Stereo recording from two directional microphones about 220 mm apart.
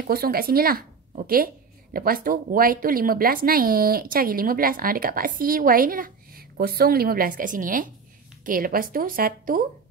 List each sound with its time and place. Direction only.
0.0 s a woman's voice: 45° right (ahead or behind)